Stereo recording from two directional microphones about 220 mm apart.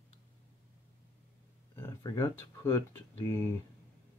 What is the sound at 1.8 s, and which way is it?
Speech, 15° left (ahead or behind).